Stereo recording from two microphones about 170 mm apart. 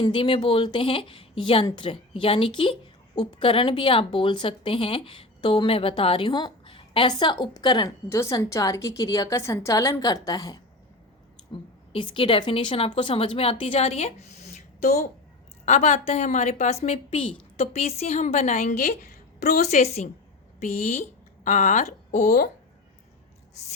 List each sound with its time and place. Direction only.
0.0 s speech: 30° left (ahead or behind)
11.9 s a woman's voice: 30° left (ahead or behind); by 22.2 s 45° left (ahead or behind)
22.2 s speech: 65° left (ahead or behind)